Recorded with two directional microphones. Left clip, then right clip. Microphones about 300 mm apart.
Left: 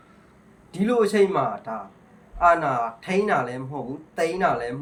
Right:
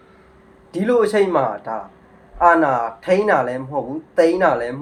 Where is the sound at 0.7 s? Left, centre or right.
Centre.